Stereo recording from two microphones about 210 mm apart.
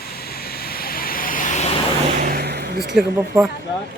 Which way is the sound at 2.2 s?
45° right (ahead or behind).